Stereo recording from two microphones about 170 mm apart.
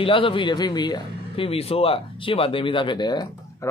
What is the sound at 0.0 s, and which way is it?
Speech, 30° left (ahead or behind).